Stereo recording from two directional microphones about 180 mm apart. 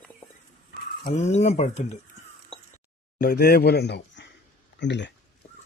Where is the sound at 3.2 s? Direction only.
55° left (ahead or behind); by 5.1 s 75° left (ahead or behind).